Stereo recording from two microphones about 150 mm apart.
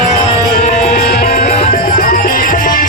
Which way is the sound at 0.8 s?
50° left (ahead or behind).